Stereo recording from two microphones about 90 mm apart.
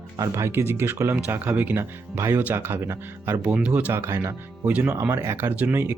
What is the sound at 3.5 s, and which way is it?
Speech, 15° right (ahead or behind).